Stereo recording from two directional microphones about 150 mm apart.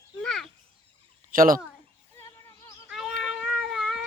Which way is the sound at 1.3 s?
70° right (ahead or behind).